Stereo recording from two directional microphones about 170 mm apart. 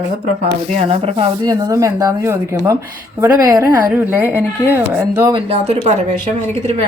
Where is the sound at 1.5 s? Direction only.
20° right (ahead or behind).